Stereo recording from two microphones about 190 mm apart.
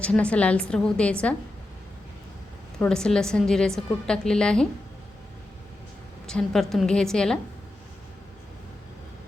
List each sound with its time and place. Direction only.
0.0 s a woman's voice: 5° left (ahead or behind)
2.7 s a woman's voice: 5° left (ahead or behind)
6.2 s a woman's voice: 5° left (ahead or behind)